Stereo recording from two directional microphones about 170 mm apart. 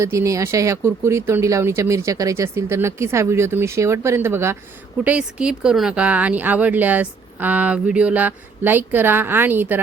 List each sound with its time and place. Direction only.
0.0 s speech: 15° right (ahead or behind)